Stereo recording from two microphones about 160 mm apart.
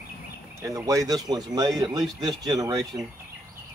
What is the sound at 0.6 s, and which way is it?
Speech, 20° right (ahead or behind).